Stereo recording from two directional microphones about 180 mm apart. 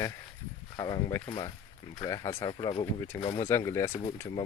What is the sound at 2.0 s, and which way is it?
Speech, 20° left (ahead or behind).